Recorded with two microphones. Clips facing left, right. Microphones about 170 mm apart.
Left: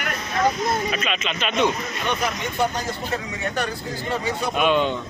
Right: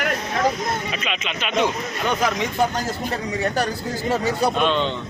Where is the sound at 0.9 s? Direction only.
15° right (ahead or behind).